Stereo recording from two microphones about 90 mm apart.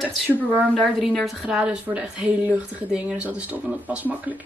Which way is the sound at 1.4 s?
10° right (ahead or behind).